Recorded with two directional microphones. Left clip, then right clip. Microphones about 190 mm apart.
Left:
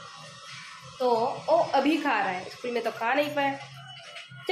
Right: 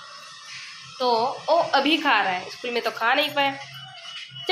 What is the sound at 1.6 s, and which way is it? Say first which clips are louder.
A woman's voice: right 4 dB; 5° right (ahead or behind).